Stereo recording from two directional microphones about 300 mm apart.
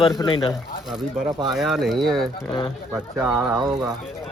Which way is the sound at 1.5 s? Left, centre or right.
Centre.